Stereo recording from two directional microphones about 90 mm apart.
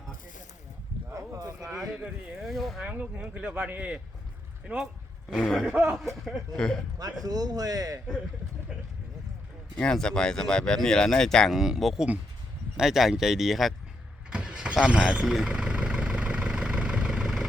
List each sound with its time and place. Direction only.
1.1 s boat: 35° right (ahead or behind)
1.6 s speech: 5° right (ahead or behind)
2.8 s speech: 15° right (ahead or behind)
5.4 s speech: 5° left (ahead or behind)
5.6 s speech: 15° right (ahead or behind)
6.2 s speech: 5° left (ahead or behind)
7.0 s a man's voice: 45° right (ahead or behind)
9.7 s speech: 10° left (ahead or behind)
14.3 s vehicle: 10° right (ahead or behind)